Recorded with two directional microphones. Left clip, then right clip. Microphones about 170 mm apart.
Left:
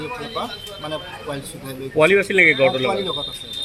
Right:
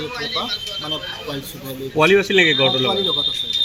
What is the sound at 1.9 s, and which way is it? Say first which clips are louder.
Speech: right 1 dB; 35° right (ahead or behind).